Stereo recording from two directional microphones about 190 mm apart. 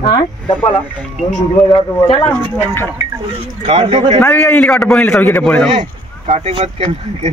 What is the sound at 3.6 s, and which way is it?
Speech, 30° right (ahead or behind).